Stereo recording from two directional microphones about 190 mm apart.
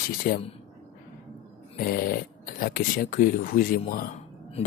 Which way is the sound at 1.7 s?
50° left (ahead or behind).